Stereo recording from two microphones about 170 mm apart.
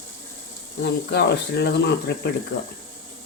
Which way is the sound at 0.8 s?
75° left (ahead or behind).